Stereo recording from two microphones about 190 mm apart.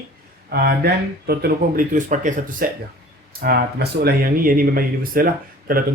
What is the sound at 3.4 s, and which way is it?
Speech, 55° right (ahead or behind).